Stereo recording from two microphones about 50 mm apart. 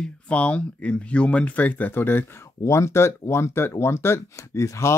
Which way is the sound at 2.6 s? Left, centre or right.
Left.